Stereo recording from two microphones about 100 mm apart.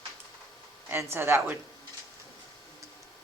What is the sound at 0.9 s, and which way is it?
Speech, 25° right (ahead or behind).